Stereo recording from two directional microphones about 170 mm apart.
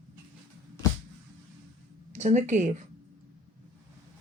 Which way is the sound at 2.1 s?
45° right (ahead or behind).